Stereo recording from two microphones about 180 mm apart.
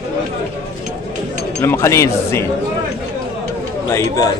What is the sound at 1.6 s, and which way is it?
Speech, 15° left (ahead or behind).